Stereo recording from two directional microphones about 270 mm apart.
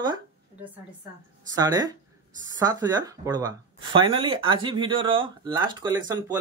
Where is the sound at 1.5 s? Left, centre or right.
Centre.